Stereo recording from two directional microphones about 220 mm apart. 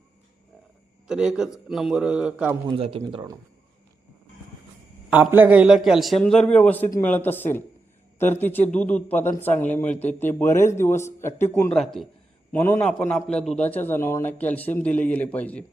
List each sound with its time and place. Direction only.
1.0 s a man's voice: 5° right (ahead or behind)
2.7 s speech: 25° right (ahead or behind)
5.1 s a man's voice: 10° right (ahead or behind)